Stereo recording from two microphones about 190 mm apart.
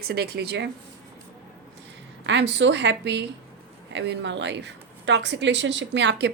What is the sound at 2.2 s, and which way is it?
A woman's voice, 65° right (ahead or behind).